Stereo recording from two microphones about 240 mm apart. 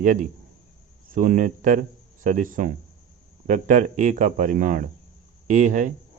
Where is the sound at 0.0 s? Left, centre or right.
Right.